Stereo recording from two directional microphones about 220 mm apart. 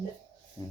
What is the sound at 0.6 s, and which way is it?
Speech, 20° left (ahead or behind).